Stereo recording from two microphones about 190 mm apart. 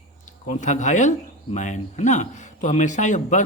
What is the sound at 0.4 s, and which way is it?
Speech, 40° left (ahead or behind).